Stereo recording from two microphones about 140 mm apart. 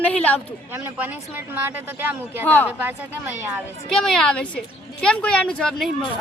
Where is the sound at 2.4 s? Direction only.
10° left (ahead or behind).